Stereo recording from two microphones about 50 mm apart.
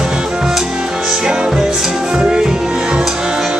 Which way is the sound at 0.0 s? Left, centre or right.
Centre.